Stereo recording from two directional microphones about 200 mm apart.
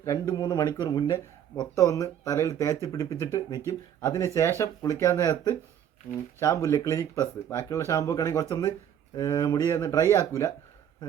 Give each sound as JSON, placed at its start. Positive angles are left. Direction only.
{"t": 0.0, "sound": "speech", "side_deg": 15}